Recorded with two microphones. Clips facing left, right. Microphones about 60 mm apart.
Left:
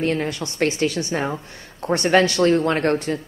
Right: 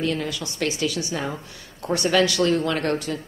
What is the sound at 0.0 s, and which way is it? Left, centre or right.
A woman's voice, left.